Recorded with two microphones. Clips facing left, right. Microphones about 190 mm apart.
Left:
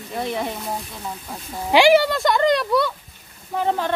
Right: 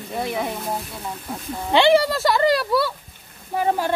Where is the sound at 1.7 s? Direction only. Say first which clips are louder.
Left 2 dB; 10° left (ahead or behind).